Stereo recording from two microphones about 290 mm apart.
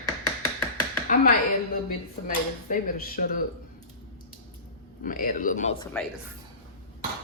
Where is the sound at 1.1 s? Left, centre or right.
Left.